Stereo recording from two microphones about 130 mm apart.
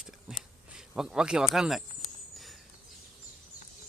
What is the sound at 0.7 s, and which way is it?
Speech, 5° right (ahead or behind).